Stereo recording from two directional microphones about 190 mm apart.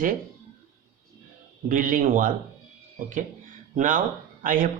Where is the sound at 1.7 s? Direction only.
45° right (ahead or behind).